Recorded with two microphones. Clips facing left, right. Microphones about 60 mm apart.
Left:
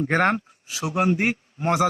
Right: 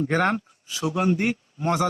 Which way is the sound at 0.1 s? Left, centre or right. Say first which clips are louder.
Left 3 dB; left.